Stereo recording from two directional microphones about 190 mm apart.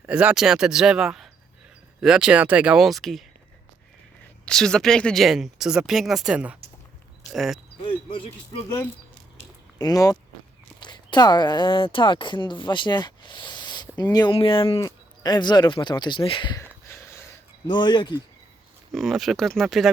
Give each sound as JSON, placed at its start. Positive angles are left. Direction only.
{"t": 0.0, "sound": "speech", "side_deg": -5}
{"t": 4.4, "sound": "speech", "side_deg": 5}
{"t": 7.8, "sound": "speech", "side_deg": 25}
{"t": 9.7, "sound": "speech", "side_deg": 20}
{"t": 17.7, "sound": "speech", "side_deg": 25}
{"t": 18.9, "sound": "speech", "side_deg": 0}